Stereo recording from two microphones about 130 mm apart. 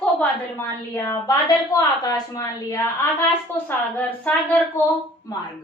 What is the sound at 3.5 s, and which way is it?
A woman's voice, 15° left (ahead or behind).